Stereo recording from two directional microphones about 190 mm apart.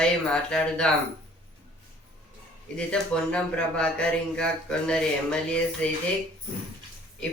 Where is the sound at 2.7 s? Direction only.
5° left (ahead or behind).